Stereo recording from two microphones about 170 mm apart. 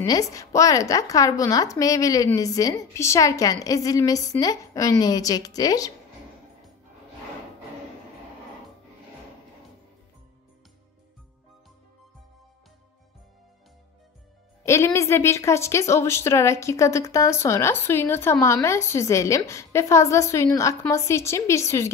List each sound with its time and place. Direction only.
0.0 s a woman's voice: 20° left (ahead or behind)
14.6 s a woman's voice: 15° left (ahead or behind)